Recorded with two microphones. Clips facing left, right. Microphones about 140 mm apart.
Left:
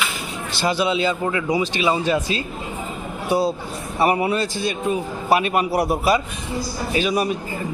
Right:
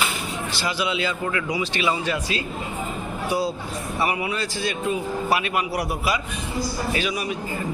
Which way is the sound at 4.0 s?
35° left (ahead or behind).